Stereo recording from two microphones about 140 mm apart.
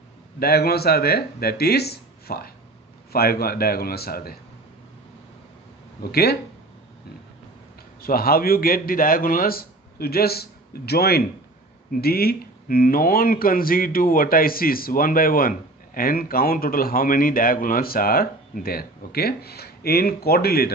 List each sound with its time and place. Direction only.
0.4 s speech: 90° left
8.0 s speech: 90° left